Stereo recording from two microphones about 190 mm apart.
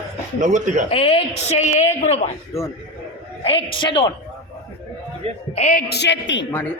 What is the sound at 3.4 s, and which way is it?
Speech, 30° left (ahead or behind).